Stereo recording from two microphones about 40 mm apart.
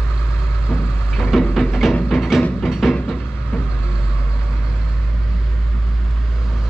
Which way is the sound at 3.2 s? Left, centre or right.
Left.